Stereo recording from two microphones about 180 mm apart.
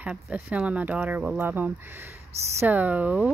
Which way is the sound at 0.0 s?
5° right (ahead or behind).